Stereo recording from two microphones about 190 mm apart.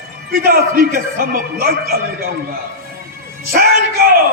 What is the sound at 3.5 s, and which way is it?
Speech, 50° right (ahead or behind).